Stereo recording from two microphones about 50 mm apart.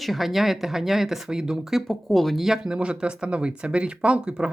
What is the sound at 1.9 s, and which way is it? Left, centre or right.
Speech, centre.